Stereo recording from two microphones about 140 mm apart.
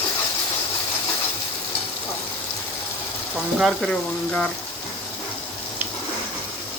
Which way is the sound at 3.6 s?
Centre (ahead or behind).